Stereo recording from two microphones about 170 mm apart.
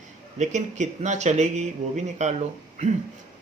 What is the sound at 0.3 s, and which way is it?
Speech, 45° right (ahead or behind).